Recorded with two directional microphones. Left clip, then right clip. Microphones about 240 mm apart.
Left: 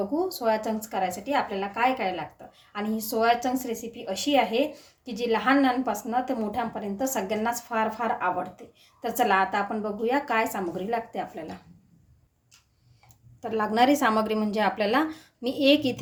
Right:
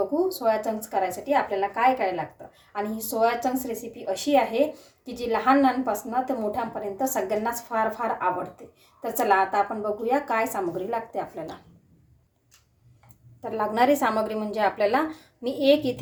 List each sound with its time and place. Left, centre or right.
0.1 s a woman's voice: centre
13.4 s a woman's voice: left